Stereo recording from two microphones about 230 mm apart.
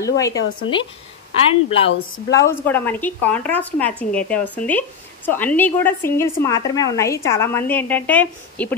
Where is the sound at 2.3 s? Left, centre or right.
Centre.